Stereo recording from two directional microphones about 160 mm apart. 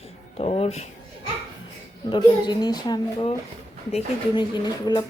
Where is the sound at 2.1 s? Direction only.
25° left (ahead or behind).